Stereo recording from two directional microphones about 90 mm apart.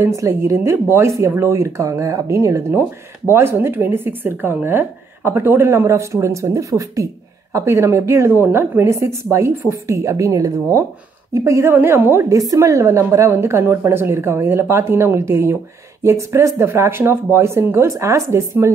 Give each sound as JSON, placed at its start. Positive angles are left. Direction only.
{"t": 0.0, "sound": "a woman's voice", "side_deg": -35}
{"t": 12.3, "sound": "a woman's voice", "side_deg": -40}